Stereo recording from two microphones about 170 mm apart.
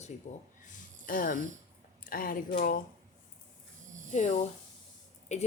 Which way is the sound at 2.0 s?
55° left (ahead or behind).